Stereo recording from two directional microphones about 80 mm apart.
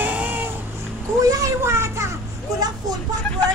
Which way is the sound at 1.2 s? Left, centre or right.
Right.